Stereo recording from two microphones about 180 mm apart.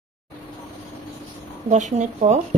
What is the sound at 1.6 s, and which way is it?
Speech, 40° right (ahead or behind).